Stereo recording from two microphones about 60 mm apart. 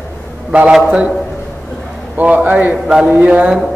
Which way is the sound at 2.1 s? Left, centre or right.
Right.